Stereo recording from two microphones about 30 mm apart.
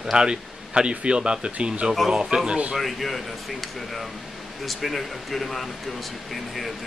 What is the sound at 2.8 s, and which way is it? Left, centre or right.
Speech, centre.